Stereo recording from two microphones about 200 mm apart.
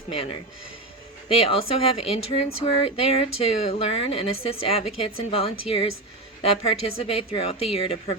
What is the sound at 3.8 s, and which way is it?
Speech, 30° left (ahead or behind).